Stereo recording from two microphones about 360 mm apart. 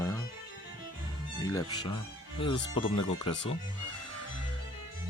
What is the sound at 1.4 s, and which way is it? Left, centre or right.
Speech, centre.